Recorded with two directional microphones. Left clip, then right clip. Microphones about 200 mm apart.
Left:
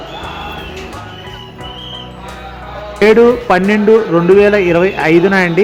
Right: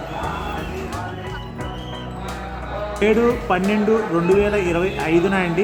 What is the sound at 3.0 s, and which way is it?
Speech, 20° left (ahead or behind).